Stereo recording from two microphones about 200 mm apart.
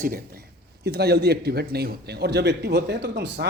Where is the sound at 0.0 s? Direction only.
45° right (ahead or behind).